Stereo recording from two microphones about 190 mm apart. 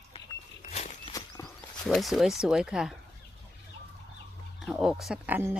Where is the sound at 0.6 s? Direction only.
40° left (ahead or behind).